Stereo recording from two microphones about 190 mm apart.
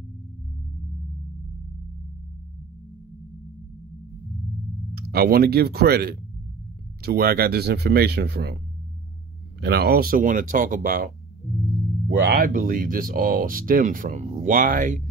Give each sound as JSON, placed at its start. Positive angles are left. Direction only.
{"t": 4.9, "sound": "speech", "side_deg": -55}
{"t": 9.6, "sound": "speech", "side_deg": -60}
{"t": 12.1, "sound": "speech", "side_deg": -55}